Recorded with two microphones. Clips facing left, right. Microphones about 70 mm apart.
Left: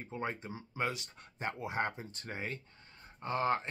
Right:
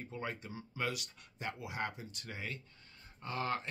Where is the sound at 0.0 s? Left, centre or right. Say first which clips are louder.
Left 3 dB; left.